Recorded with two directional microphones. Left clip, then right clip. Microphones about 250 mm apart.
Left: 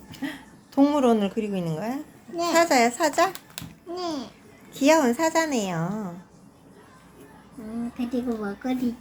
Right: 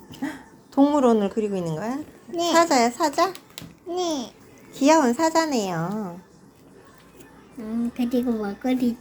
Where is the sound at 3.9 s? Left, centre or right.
Right.